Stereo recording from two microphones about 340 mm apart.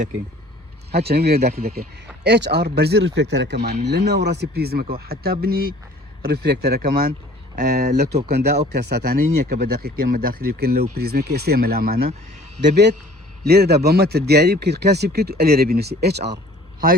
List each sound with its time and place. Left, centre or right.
0.9 s a man's voice: right